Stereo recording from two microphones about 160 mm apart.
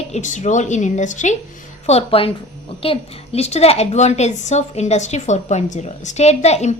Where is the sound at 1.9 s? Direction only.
35° left (ahead or behind).